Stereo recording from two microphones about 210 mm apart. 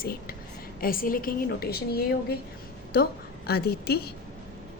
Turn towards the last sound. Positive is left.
turn(degrees=50)  # may be behind; listen again after turning